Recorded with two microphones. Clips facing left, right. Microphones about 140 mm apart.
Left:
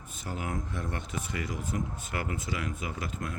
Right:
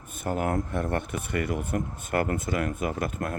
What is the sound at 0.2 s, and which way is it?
Speech, 55° right (ahead or behind).